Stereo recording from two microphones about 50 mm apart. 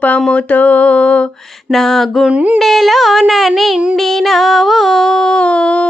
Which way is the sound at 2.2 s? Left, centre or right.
Right.